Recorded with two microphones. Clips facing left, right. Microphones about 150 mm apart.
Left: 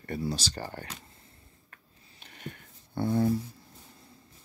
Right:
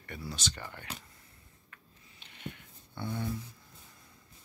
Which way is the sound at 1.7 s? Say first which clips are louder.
Left 1 dB; 45° left (ahead or behind).